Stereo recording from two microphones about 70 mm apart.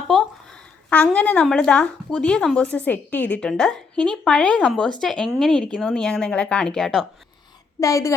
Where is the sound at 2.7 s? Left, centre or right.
Left.